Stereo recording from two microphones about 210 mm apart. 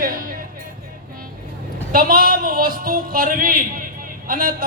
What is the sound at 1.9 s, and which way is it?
Music, 45° right (ahead or behind).